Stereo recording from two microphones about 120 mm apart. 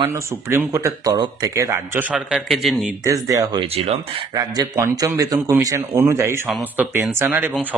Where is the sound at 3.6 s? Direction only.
55° right (ahead or behind).